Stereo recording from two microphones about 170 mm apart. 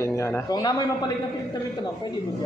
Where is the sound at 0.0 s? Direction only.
15° left (ahead or behind).